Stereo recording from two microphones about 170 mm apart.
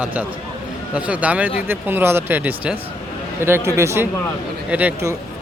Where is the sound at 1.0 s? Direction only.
10° right (ahead or behind).